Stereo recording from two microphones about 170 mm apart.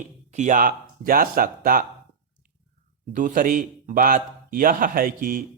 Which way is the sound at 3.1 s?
50° right (ahead or behind).